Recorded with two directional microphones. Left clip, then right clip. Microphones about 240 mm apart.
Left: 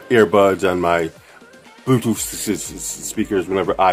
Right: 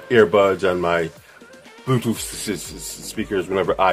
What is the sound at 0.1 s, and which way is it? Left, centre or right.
Speech, centre.